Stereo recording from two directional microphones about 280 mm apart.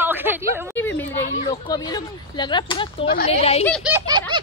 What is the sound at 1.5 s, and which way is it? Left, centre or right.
A woman's voice, centre.